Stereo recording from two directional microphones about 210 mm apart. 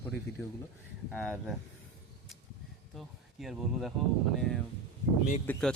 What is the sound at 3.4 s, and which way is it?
Speech, 5° right (ahead or behind).